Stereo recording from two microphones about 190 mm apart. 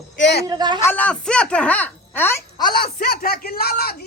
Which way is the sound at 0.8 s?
10° left (ahead or behind).